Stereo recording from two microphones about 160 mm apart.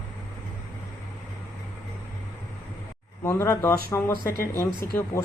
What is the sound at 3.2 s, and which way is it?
Speech, 15° left (ahead or behind).